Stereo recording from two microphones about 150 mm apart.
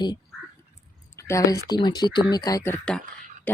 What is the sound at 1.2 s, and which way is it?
A woman's voice, 20° left (ahead or behind).